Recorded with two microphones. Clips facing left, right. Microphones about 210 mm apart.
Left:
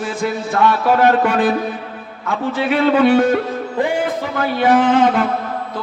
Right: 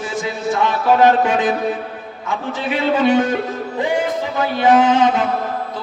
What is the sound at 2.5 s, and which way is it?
Music, 55° left (ahead or behind).